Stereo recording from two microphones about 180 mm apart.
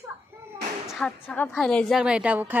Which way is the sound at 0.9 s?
5° left (ahead or behind).